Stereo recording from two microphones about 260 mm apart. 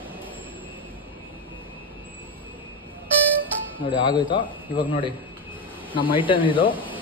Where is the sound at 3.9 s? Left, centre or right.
Centre.